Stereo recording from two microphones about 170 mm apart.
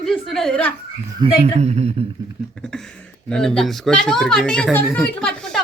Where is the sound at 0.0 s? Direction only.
Centre (ahead or behind).